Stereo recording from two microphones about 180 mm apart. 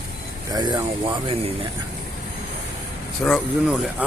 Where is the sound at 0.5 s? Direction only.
20° right (ahead or behind).